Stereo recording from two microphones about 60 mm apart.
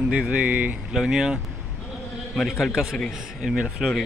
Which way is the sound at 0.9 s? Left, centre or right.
Centre.